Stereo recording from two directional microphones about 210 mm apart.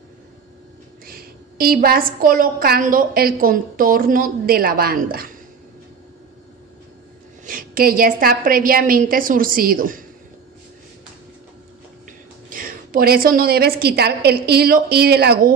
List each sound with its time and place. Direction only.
1.0 s a woman's voice: 45° right (ahead or behind)
7.4 s a woman's voice: 40° right (ahead or behind)
12.4 s a woman's voice: 40° right (ahead or behind)